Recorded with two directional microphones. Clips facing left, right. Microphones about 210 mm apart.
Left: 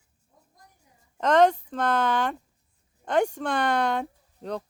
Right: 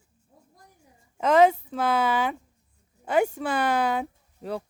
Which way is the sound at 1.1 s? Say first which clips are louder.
Right 1 dB; 5° right (ahead or behind).